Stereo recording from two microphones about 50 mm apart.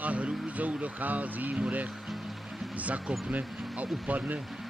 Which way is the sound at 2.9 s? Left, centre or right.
Right.